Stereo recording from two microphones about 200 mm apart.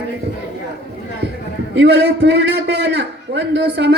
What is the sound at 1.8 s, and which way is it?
A man's voice, 55° right (ahead or behind).